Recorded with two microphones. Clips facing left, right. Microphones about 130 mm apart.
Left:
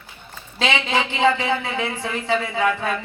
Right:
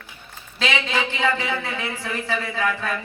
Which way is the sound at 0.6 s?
25° left (ahead or behind).